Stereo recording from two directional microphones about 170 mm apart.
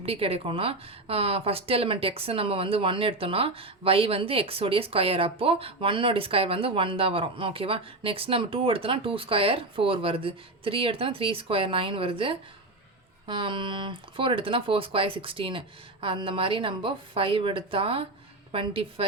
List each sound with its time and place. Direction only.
0.0 s a woman's voice: 35° right (ahead or behind)